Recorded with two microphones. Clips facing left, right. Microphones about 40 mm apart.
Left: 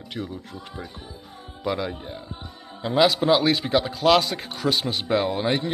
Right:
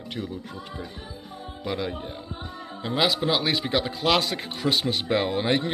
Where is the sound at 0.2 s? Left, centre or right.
Centre.